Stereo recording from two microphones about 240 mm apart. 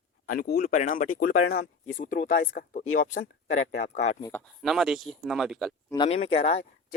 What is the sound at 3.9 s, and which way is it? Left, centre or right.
Speech, left.